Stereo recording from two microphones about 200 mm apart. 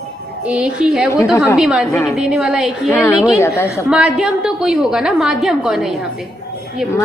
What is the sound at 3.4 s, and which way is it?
Speech, 15° left (ahead or behind).